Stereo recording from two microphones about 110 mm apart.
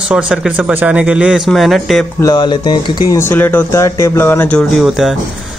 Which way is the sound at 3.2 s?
20° left (ahead or behind).